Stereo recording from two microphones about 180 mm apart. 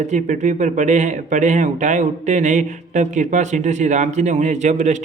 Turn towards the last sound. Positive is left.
turn(degrees=-40)  # may be behind; listen again after turning